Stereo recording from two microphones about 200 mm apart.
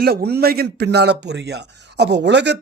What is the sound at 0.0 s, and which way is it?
Speech, 50° right (ahead or behind).